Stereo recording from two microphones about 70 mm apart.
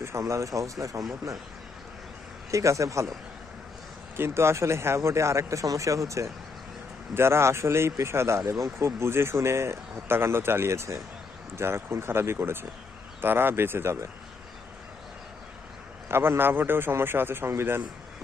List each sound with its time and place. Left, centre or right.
0.0 s speech: right
2.5 s speech: right
4.2 s speech: right
7.1 s speech: right
16.0 s speech: right